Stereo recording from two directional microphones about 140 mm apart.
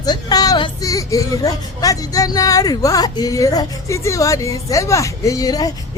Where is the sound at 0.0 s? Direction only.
30° left (ahead or behind).